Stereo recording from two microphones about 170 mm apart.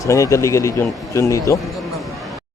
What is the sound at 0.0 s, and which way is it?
Speech, 20° left (ahead or behind).